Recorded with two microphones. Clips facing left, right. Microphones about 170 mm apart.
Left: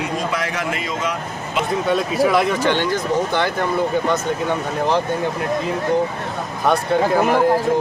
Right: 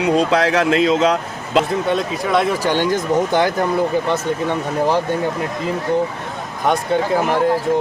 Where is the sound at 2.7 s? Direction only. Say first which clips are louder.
Right 2 dB; 15° right (ahead or behind).